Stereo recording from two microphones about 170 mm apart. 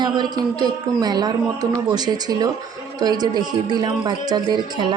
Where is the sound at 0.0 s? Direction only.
25° right (ahead or behind).